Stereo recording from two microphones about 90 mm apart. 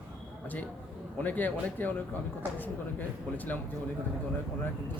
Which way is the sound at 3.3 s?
20° left (ahead or behind).